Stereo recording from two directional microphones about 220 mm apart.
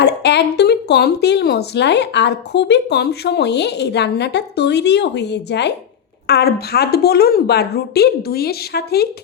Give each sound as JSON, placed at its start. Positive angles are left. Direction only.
{"t": 0.0, "sound": "speech", "side_deg": 50}